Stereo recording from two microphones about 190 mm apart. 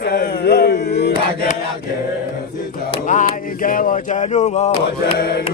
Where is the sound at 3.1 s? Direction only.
40° left (ahead or behind).